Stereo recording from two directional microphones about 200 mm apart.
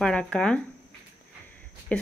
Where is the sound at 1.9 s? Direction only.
5° left (ahead or behind).